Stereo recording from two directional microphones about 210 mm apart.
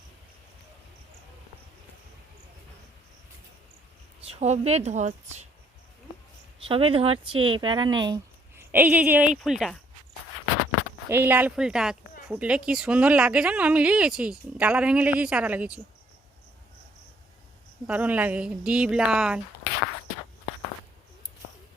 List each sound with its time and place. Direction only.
4.3 s speech: 30° right (ahead or behind)
6.6 s speech: 25° right (ahead or behind); by 9.7 s centre (ahead or behind)
11.1 s speech: 10° right (ahead or behind)
17.8 s speech: 5° right (ahead or behind)